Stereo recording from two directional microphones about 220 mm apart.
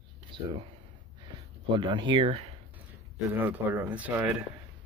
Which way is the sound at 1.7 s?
20° right (ahead or behind).